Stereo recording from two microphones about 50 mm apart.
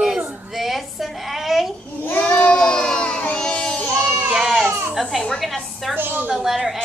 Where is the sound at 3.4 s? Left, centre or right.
Centre.